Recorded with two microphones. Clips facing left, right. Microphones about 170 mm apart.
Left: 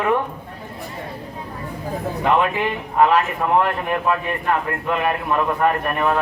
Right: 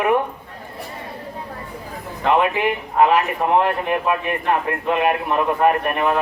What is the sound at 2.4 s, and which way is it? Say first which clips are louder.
A man's voice: right 1 dB; 15° right (ahead or behind).